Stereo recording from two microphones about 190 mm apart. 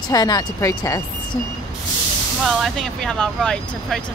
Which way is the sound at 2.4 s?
Centre (ahead or behind).